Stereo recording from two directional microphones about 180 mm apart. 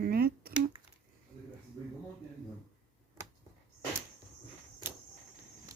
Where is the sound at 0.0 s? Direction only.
55° right (ahead or behind).